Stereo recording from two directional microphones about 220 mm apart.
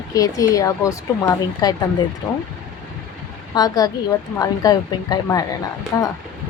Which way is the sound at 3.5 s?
15° left (ahead or behind).